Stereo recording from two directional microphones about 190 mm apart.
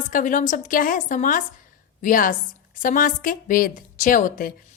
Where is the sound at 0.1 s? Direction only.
45° left (ahead or behind).